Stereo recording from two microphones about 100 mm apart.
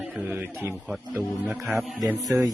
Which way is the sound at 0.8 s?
5° right (ahead or behind).